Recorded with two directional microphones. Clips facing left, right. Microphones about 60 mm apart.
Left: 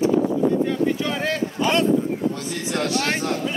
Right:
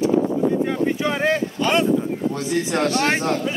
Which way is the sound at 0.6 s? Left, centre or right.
Right.